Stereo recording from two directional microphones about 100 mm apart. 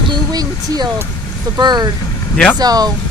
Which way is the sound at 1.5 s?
45° right (ahead or behind).